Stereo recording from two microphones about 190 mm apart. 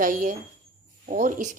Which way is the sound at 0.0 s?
45° right (ahead or behind).